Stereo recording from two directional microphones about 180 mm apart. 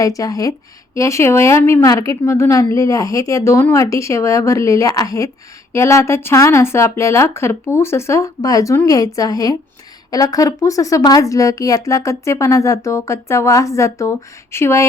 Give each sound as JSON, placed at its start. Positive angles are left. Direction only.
{"t": 0.0, "sound": "a woman's voice", "side_deg": 20}